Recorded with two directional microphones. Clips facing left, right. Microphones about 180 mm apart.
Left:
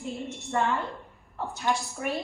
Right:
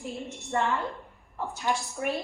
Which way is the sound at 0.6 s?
Centre (ahead or behind).